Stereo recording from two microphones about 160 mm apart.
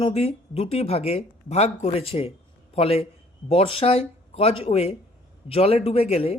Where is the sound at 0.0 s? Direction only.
40° left (ahead or behind).